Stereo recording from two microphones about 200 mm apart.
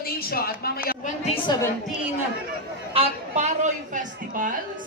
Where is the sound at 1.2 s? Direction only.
25° left (ahead or behind).